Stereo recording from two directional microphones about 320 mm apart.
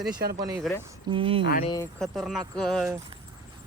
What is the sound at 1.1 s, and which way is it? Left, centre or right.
Speech, centre.